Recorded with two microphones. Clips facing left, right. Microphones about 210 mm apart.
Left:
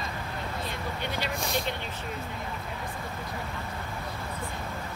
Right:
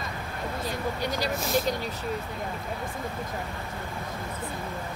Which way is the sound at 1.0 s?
40° right (ahead or behind).